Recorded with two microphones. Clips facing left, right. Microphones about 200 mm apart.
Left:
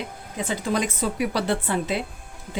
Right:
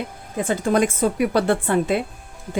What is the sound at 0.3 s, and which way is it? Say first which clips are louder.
Speech: right 6 dB; 50° right (ahead or behind).